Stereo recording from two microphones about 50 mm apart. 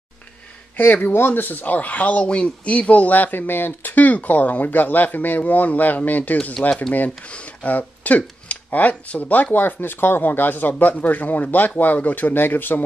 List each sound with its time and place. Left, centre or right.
1.1 s speech: left